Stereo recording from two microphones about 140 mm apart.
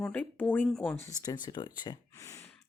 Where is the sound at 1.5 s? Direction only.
30° left (ahead or behind).